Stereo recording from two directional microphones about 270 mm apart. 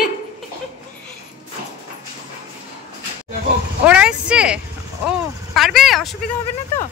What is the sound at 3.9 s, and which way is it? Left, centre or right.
Speech, centre.